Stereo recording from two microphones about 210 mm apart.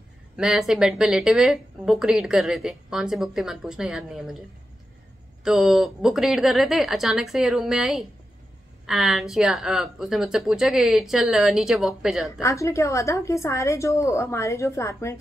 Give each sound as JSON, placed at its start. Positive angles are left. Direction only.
{"t": 0.4, "sound": "speech", "side_deg": 0}
{"t": 5.4, "sound": "speech", "side_deg": 0}
{"t": 12.4, "sound": "a woman's voice", "side_deg": 15}